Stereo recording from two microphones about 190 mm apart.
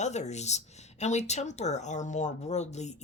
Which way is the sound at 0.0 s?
35° left (ahead or behind).